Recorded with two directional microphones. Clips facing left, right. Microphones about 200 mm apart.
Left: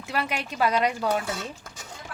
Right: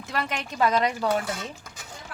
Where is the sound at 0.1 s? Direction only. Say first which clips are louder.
Left 1 dB; 10° left (ahead or behind).